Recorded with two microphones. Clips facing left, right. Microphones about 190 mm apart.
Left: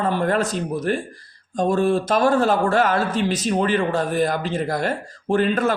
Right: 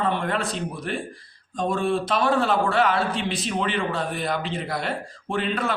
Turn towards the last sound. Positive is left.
turn(degrees=45)  # may be behind; listen again after turning